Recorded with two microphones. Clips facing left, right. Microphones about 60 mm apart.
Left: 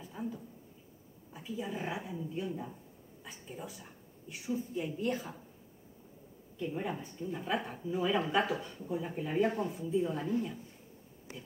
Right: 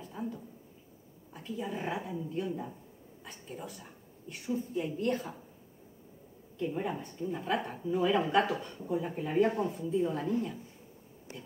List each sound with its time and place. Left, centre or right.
0.0 s a sound: centre
1.3 s a woman's voice: centre
3.3 s a woman's voice: centre
6.6 s a woman's voice: centre
8.7 s a woman's voice: centre